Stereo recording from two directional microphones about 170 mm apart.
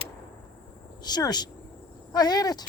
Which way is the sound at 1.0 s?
25° left (ahead or behind).